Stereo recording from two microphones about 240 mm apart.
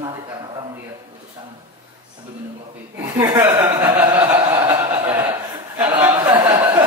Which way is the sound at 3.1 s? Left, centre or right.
Centre.